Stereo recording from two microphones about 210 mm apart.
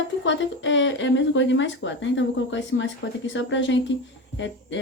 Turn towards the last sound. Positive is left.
turn(degrees=60)  # may be behind; listen again after turning